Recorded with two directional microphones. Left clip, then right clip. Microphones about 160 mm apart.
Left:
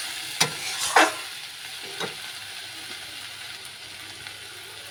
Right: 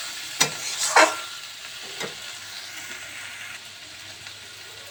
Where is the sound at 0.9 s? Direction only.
30° left (ahead or behind).